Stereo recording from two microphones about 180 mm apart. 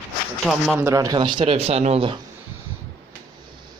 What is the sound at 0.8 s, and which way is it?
Speech, 15° right (ahead or behind).